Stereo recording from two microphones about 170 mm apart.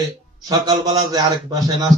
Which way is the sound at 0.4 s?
25° right (ahead or behind).